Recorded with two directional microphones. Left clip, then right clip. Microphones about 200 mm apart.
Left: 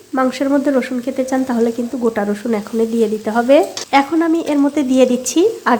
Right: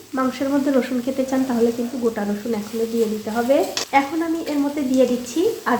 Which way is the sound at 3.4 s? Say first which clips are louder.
Left 6 dB; 45° left (ahead or behind).